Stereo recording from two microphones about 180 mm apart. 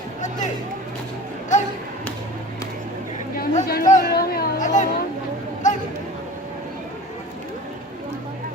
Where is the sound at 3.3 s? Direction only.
50° left (ahead or behind).